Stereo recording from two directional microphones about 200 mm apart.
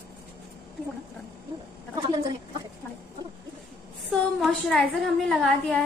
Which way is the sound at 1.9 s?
25° right (ahead or behind).